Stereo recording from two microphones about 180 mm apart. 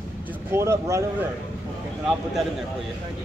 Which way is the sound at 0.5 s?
15° right (ahead or behind).